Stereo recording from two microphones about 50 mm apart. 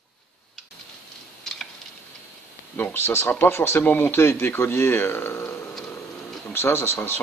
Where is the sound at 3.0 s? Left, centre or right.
Left.